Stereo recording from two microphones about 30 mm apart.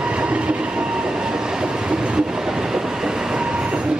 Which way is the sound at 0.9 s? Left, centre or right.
Right.